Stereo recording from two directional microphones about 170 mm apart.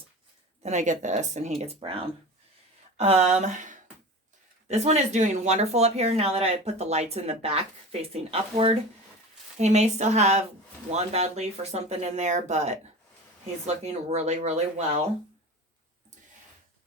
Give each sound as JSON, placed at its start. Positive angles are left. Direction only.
{"t": 0.6, "sound": "speech", "side_deg": -45}